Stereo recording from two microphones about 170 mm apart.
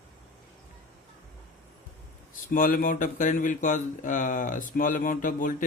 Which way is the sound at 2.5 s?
55° left (ahead or behind).